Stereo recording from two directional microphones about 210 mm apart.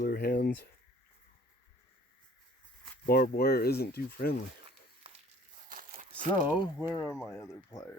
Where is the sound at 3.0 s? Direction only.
45° left (ahead or behind).